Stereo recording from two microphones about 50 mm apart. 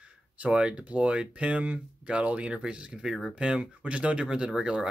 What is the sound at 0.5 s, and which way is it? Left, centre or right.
Speech, centre.